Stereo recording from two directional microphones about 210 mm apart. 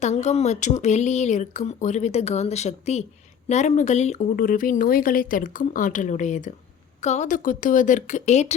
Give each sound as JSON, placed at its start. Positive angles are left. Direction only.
{"t": 0.0, "sound": "speech", "side_deg": 30}